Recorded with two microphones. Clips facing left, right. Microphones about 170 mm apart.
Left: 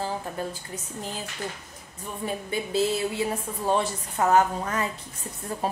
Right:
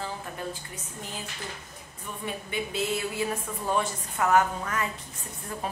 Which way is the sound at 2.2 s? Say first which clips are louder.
Left 3 dB; 35° left (ahead or behind).